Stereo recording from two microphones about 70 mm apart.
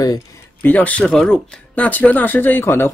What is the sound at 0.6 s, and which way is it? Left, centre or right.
Speech, left.